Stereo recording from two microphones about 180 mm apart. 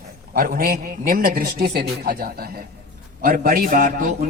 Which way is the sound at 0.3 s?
55° right (ahead or behind).